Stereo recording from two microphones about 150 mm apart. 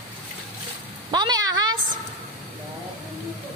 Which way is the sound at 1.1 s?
25° right (ahead or behind).